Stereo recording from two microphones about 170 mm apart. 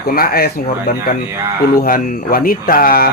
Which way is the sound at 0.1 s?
60° left (ahead or behind).